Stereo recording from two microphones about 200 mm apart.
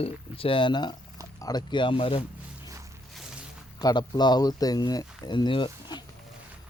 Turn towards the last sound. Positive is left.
turn(degrees=25)  # may be behind; listen again after turning